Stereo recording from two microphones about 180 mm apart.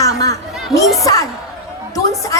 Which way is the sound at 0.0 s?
20° left (ahead or behind).